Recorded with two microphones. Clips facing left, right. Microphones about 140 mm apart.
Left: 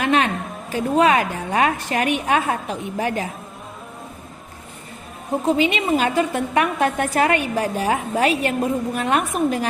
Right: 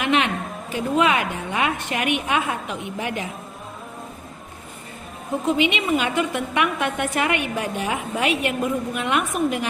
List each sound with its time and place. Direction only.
0.0 s a sound: 40° left (ahead or behind)
0.7 s a woman's voice: 40° left (ahead or behind)
5.5 s a woman's voice: 35° left (ahead or behind)